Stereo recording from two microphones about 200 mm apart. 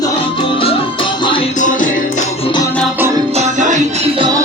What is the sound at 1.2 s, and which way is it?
Music, 25° left (ahead or behind).